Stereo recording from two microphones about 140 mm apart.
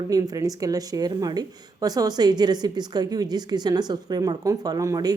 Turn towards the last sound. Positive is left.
turn(degrees=-25)  # may be behind; listen again after turning